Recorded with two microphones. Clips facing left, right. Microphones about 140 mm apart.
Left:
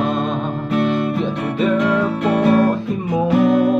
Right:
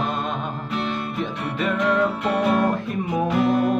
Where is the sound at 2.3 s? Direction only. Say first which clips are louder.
Left 8 dB; 45° left (ahead or behind).